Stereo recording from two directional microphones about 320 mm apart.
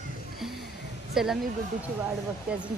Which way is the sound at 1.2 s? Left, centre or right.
Centre.